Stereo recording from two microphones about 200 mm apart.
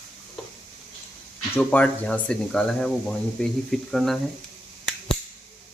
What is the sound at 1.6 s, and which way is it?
Speech, 5° left (ahead or behind).